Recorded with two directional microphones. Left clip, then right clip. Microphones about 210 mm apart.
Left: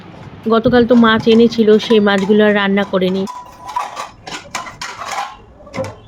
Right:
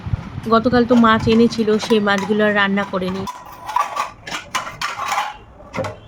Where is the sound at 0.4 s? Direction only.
10° left (ahead or behind).